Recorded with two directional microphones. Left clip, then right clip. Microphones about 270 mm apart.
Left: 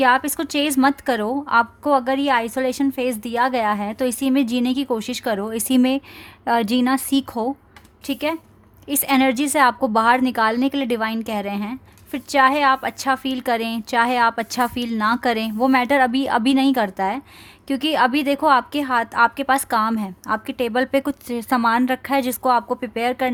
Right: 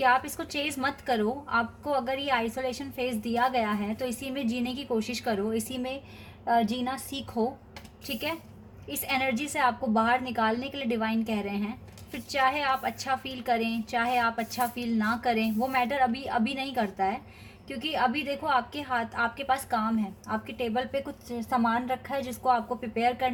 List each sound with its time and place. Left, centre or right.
0.0 s a woman's voice: left
8.0 s a woman's voice: left